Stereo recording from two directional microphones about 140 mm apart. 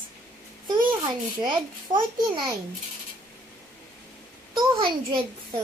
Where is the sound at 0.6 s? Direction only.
30° right (ahead or behind).